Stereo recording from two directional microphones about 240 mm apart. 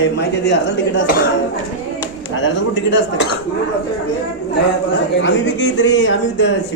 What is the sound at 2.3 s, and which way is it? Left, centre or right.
Speech, left.